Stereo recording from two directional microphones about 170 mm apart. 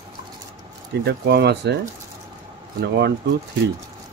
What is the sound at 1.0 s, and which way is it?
Speech, 75° right (ahead or behind).